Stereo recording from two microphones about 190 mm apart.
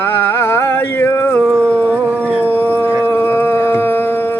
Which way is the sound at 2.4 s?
10° left (ahead or behind).